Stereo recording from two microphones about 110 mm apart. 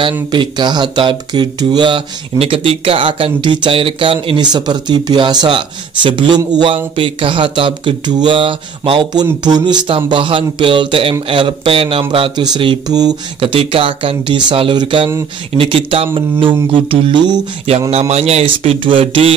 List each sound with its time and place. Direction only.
0.3 s speech: 45° right (ahead or behind)
12.4 s speech: 45° right (ahead or behind)
13.4 s speech: 55° right (ahead or behind)
17.9 s speech: 75° right (ahead or behind); by 19.3 s 50° right (ahead or behind)